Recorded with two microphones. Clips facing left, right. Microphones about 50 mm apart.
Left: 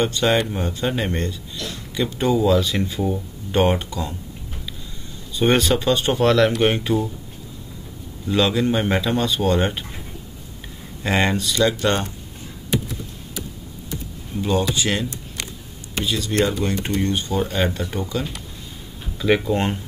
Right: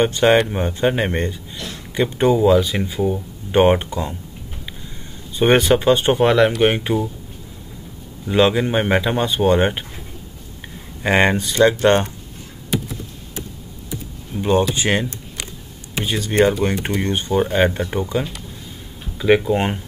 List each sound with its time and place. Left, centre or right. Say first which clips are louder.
0.0 s speech: right 5 dB; right; by 3.2 s centre
3.5 s speech: right 5 dB; right
5.4 s speech: right 4 dB; right
8.3 s speech: right 3 dB; right
11.0 s speech: right 4 dB; right
14.3 s speech: right 1 dB; centre
14.7 s speech: right 3 dB; right
19.1 s speech: right 3 dB; centre